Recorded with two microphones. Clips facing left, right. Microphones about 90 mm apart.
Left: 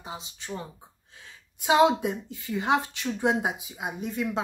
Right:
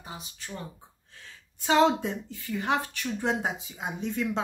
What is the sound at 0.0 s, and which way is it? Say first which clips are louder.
Speech: left 3 dB; 20° left (ahead or behind).